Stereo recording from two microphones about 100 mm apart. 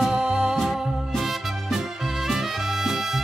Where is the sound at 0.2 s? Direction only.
15° right (ahead or behind).